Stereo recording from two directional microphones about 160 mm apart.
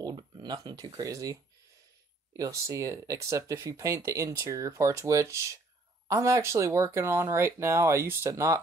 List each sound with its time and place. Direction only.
0.0 s speech: 25° right (ahead or behind)